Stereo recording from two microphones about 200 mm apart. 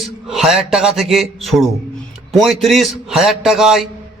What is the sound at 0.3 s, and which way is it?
A man's voice, centre (ahead or behind).